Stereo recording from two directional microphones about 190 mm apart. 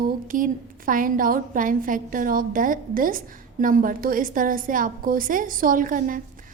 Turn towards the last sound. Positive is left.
turn(degrees=-45)  # may be behind; listen again after turning